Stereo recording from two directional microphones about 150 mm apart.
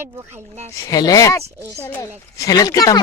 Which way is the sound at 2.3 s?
25° left (ahead or behind).